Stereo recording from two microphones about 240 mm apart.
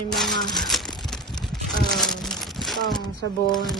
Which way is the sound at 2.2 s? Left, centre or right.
Centre.